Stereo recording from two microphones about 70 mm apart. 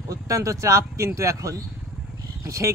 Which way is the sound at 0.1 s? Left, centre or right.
Right.